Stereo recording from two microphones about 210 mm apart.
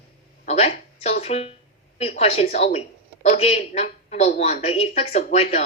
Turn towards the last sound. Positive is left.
turn(degrees=30)  # may be behind; listen again after turning